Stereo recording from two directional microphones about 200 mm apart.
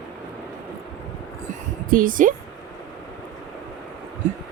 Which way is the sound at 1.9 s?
45° right (ahead or behind).